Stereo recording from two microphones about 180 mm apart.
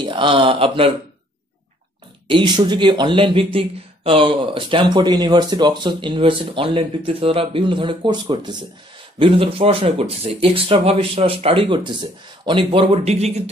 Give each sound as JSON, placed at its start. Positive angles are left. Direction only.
{"t": 0.0, "sound": "speech", "side_deg": -25}
{"t": 2.2, "sound": "speech", "side_deg": -25}